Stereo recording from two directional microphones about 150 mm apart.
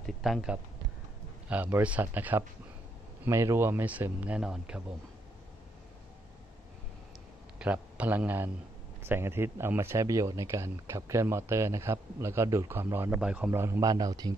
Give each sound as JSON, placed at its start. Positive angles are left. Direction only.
{"t": 0.0, "sound": "speech", "side_deg": 0}
{"t": 7.5, "sound": "a man's voice", "side_deg": -10}
{"t": 13.5, "sound": "a man's voice", "side_deg": -20}